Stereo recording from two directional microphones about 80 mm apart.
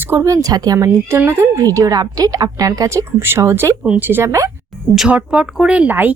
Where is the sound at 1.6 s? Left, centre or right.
Right.